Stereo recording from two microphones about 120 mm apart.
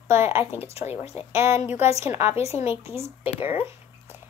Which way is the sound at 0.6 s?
60° left (ahead or behind).